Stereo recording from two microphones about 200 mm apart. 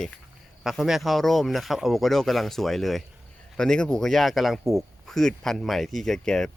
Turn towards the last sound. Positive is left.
turn(degrees=5)  # may be behind; listen again after turning